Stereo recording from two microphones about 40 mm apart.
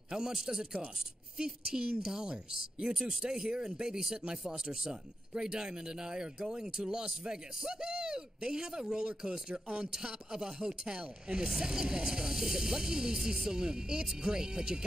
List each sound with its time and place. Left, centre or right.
0.1 s a woman's voice: centre